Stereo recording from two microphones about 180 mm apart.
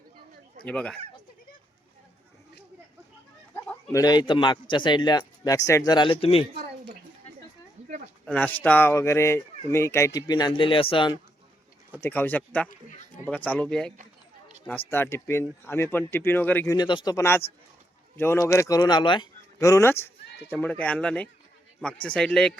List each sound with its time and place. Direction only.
0.6 s speech: 5° left (ahead or behind)
3.5 s a man's voice: 15° left (ahead or behind); by 6.4 s 35° left (ahead or behind)
8.3 s speech: 10° left (ahead or behind); by 11.2 s 25° left (ahead or behind)
11.9 s speech: 10° left (ahead or behind)
16.7 s speech: 25° left (ahead or behind); by 22.5 s 5° left (ahead or behind)